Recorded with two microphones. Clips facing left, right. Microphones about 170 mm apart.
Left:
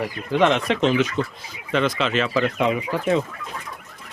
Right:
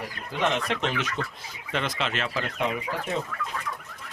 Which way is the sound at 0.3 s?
90° left.